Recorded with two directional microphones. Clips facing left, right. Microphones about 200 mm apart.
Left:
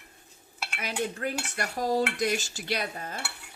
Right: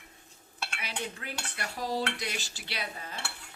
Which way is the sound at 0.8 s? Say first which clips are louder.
Left 9 dB; 45° left (ahead or behind).